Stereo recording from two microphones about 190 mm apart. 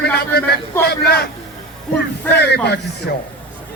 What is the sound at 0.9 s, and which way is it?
Speech, 55° left (ahead or behind).